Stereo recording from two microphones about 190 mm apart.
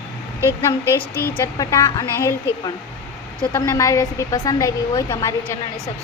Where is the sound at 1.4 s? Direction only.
15° left (ahead or behind).